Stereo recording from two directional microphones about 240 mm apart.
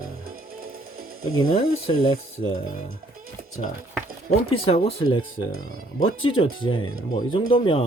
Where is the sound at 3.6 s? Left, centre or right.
Left.